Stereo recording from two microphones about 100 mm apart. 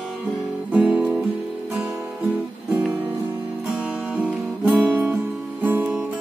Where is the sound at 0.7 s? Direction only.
15° right (ahead or behind).